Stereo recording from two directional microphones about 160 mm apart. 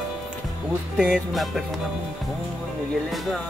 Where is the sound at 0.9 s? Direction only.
5° right (ahead or behind).